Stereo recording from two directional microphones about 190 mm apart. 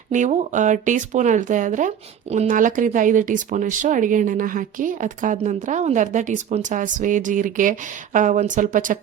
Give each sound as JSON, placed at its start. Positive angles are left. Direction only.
{"t": 0.1, "sound": "speech", "side_deg": -40}